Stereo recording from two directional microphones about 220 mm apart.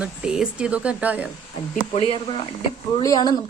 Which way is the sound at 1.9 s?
25° left (ahead or behind).